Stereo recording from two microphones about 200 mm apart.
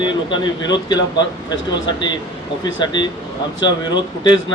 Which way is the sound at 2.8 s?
20° left (ahead or behind).